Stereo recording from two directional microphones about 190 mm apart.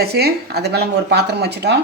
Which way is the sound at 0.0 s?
55° right (ahead or behind).